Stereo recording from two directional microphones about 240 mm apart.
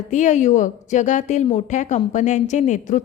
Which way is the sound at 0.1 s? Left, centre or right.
Left.